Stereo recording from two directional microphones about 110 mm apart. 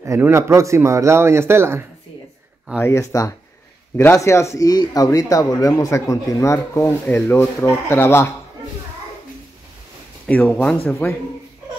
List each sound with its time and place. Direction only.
0.0 s speech: 25° right (ahead or behind)
2.8 s speech: 25° left (ahead or behind)
10.2 s speech: 10° left (ahead or behind)